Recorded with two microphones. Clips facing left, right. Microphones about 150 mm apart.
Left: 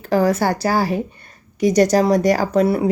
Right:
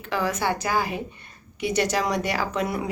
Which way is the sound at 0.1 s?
40° left (ahead or behind).